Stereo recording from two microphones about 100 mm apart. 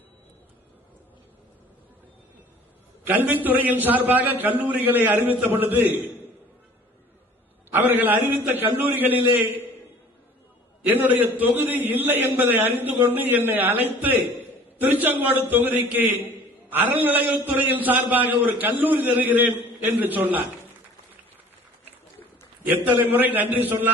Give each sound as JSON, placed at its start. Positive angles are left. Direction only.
{"t": 3.0, "sound": "a man's voice", "side_deg": -15}
{"t": 7.7, "sound": "a man's voice", "side_deg": -20}
{"t": 10.8, "sound": "a man's voice", "side_deg": -20}
{"t": 22.6, "sound": "a man's voice", "side_deg": -20}